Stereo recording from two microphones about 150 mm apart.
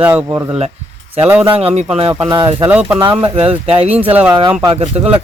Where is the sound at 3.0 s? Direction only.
35° right (ahead or behind).